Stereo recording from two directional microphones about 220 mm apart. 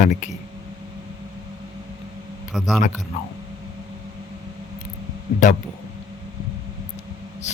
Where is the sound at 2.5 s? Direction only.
Centre (ahead or behind).